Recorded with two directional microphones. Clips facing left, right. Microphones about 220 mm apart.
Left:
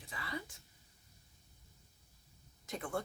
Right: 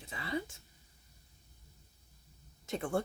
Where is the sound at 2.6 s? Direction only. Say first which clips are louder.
Right 5 dB; 25° right (ahead or behind).